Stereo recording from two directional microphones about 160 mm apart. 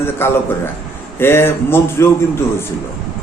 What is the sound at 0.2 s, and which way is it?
A man's voice, 15° left (ahead or behind).